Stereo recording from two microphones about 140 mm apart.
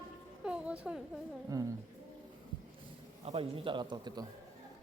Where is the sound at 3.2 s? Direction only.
40° right (ahead or behind).